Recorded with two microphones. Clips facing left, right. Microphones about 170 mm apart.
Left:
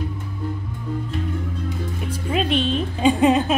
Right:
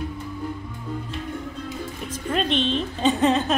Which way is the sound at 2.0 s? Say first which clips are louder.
Left 2 dB; 10° left (ahead or behind).